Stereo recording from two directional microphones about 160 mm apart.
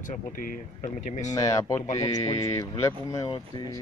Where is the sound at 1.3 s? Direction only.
20° left (ahead or behind).